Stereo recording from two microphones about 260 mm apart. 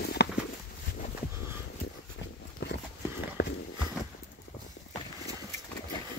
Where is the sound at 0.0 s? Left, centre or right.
Left.